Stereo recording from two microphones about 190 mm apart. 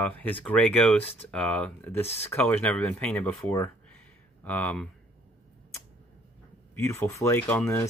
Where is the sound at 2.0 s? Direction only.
35° left (ahead or behind).